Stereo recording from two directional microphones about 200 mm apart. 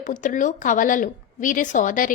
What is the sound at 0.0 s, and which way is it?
A woman's voice, 40° left (ahead or behind).